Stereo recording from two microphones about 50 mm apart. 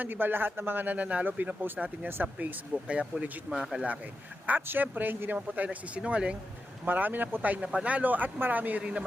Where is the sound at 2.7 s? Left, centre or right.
Right.